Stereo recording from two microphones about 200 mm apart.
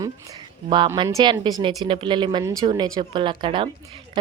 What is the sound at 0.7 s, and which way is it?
A man's voice, 20° right (ahead or behind).